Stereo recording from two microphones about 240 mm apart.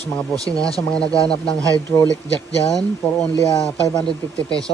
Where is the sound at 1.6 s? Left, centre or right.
Centre.